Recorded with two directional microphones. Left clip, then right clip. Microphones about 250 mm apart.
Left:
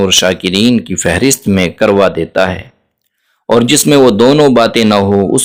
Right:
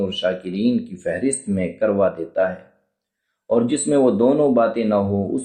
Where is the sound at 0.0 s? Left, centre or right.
Left.